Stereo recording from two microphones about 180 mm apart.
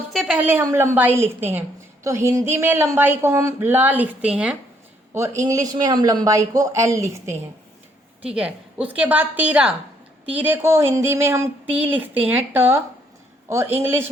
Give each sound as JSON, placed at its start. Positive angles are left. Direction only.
{"t": 0.1, "sound": "a woman's voice", "side_deg": 0}
{"t": 8.4, "sound": "speech", "side_deg": -5}